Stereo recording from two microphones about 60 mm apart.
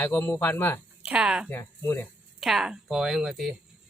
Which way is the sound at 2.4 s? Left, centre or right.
Centre.